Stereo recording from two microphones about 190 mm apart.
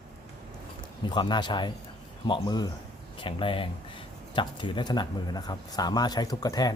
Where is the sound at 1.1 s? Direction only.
25° left (ahead or behind).